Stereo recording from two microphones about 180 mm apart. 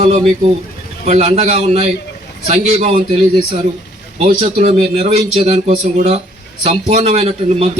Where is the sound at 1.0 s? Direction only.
35° right (ahead or behind).